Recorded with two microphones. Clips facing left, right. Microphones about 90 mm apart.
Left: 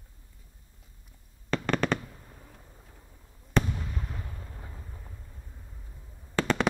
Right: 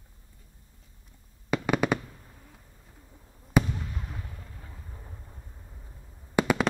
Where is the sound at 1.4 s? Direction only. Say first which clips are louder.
Right 2 dB; 10° right (ahead or behind).